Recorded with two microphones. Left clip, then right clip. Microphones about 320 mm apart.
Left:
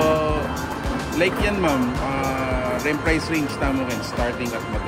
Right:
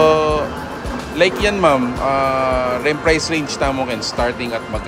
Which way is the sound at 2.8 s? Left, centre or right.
Centre.